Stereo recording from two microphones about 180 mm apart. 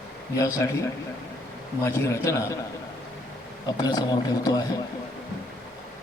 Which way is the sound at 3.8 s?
20° left (ahead or behind).